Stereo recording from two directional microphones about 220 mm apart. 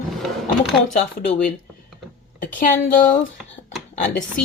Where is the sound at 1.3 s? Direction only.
40° left (ahead or behind).